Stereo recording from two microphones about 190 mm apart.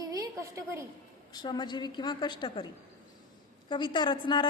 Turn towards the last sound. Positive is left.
turn(degrees=25)  # may be behind; listen again after turning